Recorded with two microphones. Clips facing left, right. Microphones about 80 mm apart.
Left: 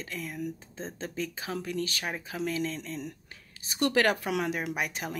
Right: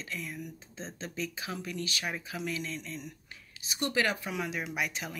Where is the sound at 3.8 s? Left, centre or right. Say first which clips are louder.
Left 5 dB; left.